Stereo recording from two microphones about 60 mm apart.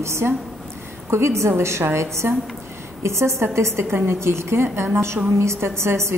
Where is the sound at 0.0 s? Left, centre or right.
Right.